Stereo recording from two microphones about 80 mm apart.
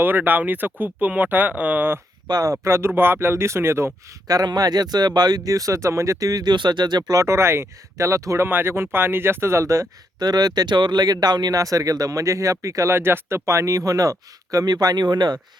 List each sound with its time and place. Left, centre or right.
0.0 s speech: right
2.2 s speech: right
2.5 s speech: right
4.3 s speech: right
7.2 s speech: right
8.4 s speech: right
10.2 s speech: right
11.5 s speech: right